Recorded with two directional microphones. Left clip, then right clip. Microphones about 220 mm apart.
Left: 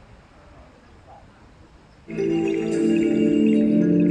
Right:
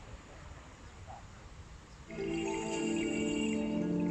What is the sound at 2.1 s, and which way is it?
Music, 45° left (ahead or behind).